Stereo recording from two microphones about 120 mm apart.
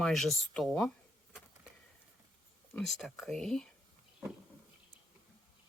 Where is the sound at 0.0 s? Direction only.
Centre (ahead or behind).